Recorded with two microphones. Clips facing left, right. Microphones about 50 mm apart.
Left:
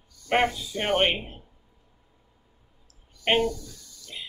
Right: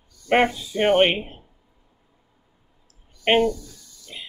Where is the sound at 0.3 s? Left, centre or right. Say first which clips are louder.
Right 4 dB; right.